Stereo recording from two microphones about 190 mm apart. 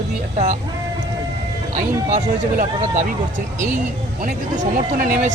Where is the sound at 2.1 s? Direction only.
45° right (ahead or behind).